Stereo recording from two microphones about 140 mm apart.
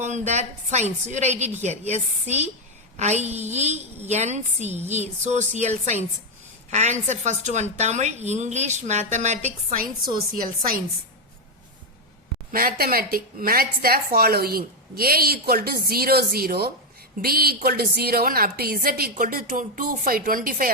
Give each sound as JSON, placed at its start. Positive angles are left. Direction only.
{"t": 0.0, "sound": "a woman's voice", "side_deg": -55}
{"t": 10.3, "sound": "a woman's voice", "side_deg": -80}
{"t": 12.5, "sound": "a woman's voice", "side_deg": -90}